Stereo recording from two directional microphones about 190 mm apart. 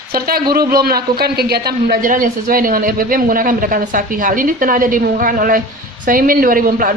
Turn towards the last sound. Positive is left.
turn(degrees=-45)  # may be behind; listen again after turning